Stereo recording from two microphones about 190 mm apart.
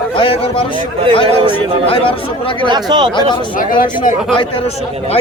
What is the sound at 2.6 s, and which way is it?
Speech, 25° right (ahead or behind).